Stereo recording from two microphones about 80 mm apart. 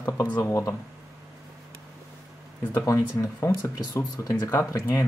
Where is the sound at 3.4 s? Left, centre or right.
Left.